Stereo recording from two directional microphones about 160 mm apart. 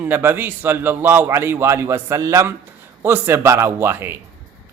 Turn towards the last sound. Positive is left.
turn(degrees=-15)  # may be behind; listen again after turning